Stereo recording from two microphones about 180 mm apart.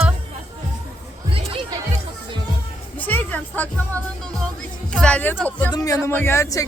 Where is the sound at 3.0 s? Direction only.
10° left (ahead or behind).